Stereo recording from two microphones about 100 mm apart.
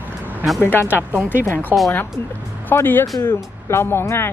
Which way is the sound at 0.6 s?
25° left (ahead or behind).